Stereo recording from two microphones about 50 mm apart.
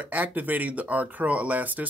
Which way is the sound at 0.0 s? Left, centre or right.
Right.